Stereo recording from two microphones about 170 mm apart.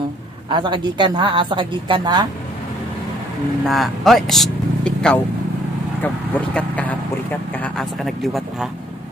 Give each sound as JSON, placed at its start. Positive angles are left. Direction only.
{"t": 0.5, "sound": "a woman's voice", "side_deg": -25}
{"t": 3.6, "sound": "speech", "side_deg": 0}